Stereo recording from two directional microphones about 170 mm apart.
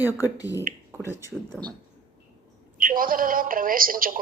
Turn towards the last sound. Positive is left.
turn(degrees=-55)  # may be behind; listen again after turning